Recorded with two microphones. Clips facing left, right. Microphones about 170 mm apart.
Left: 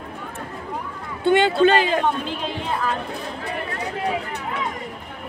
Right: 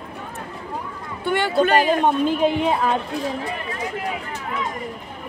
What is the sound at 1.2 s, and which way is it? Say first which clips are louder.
Speech: left 5 dB; 20° left (ahead or behind).